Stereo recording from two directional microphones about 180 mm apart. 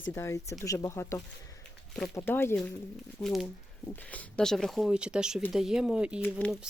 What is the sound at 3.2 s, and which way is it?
Speech, centre (ahead or behind).